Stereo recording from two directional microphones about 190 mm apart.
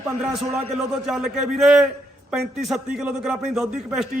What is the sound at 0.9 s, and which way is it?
Speech, 5° right (ahead or behind).